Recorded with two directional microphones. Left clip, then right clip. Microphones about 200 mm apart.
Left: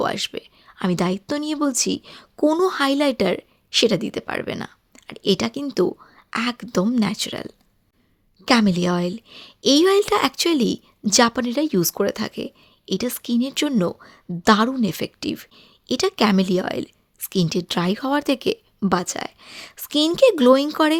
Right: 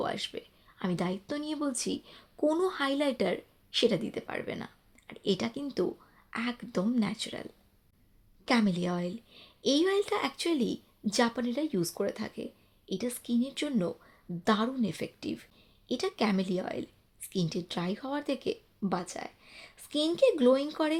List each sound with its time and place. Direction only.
0.0 s a woman's voice: 40° left (ahead or behind)
8.4 s a woman's voice: 35° left (ahead or behind)